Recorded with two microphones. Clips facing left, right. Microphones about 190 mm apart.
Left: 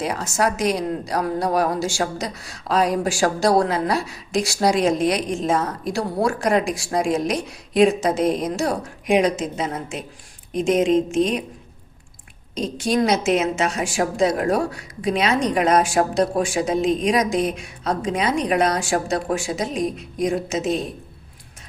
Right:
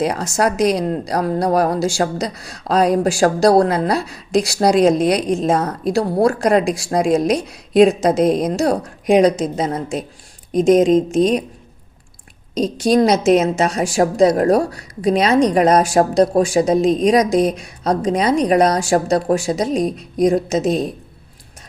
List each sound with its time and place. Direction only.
0.0 s a woman's voice: 40° right (ahead or behind)
12.5 s a woman's voice: 40° right (ahead or behind)